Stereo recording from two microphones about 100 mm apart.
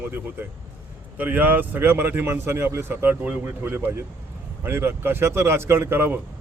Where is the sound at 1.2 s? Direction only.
15° right (ahead or behind).